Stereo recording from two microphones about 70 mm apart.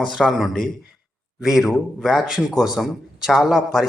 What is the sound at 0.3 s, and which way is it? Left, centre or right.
A man's voice, centre.